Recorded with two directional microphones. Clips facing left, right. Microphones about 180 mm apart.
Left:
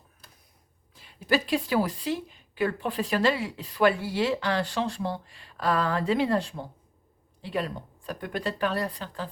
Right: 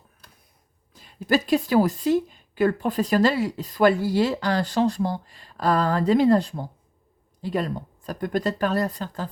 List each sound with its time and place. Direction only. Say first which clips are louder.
0.9 s a woman's voice: right 4 dB; 45° right (ahead or behind)